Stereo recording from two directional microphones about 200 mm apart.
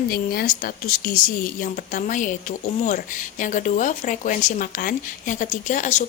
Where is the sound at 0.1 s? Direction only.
45° left (ahead or behind).